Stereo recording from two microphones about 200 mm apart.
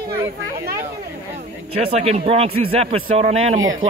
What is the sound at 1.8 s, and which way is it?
Speech, 30° right (ahead or behind).